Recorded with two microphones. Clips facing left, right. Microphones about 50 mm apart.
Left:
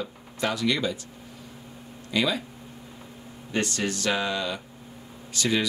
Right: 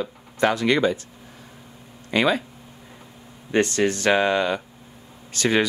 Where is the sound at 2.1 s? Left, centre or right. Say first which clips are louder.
Right 5 dB; right.